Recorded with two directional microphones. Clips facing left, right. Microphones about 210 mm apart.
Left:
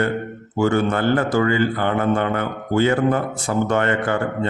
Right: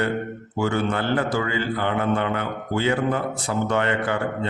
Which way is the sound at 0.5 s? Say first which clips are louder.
Left 5 dB; 45° left (ahead or behind).